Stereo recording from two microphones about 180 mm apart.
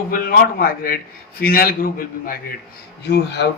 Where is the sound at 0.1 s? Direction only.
55° left (ahead or behind).